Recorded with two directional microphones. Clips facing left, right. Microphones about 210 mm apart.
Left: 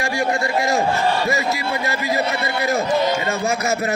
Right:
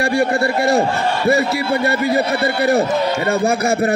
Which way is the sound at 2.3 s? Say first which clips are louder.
Right 6 dB; 35° right (ahead or behind).